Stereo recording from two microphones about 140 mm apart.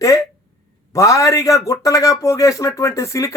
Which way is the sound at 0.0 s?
20° left (ahead or behind).